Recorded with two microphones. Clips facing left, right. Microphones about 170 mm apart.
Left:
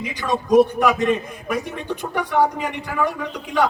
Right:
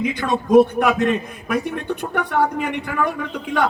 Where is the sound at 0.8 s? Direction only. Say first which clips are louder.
Even; 55° right (ahead or behind).